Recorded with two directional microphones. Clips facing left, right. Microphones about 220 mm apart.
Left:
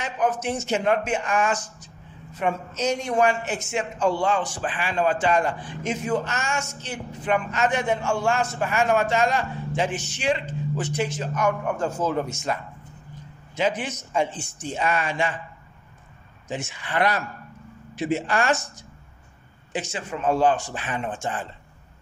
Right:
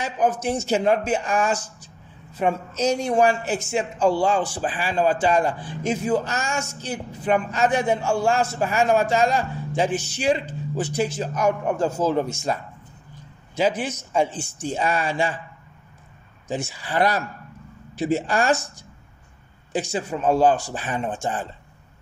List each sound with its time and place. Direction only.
0.0 s a man's voice: 35° right (ahead or behind)
13.6 s a man's voice: 35° right (ahead or behind)
16.4 s a man's voice: 35° right (ahead or behind)
19.7 s a man's voice: 35° right (ahead or behind)